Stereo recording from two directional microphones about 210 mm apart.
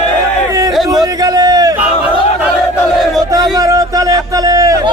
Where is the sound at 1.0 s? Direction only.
15° right (ahead or behind).